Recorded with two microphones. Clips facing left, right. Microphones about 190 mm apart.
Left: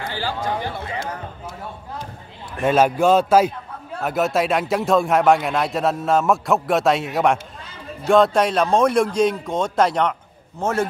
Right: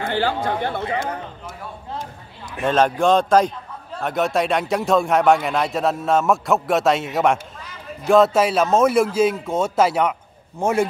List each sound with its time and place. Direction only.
0.0 s speech: 60° right (ahead or behind)
2.6 s a man's voice: 10° left (ahead or behind); by 10.9 s 15° right (ahead or behind)